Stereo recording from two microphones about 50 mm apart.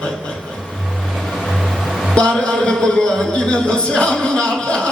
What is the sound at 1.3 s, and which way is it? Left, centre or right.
Music, centre.